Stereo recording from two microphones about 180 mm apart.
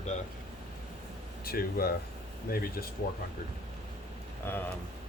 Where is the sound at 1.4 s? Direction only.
55° left (ahead or behind).